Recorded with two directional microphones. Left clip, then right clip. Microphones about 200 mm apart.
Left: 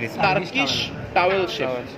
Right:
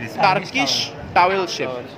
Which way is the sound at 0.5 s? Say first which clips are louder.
Right 2 dB; 30° right (ahead or behind).